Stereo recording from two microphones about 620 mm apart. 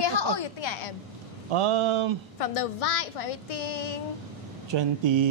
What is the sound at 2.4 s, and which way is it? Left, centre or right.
A woman's voice, left.